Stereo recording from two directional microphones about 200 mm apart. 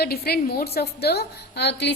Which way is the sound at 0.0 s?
50° left (ahead or behind).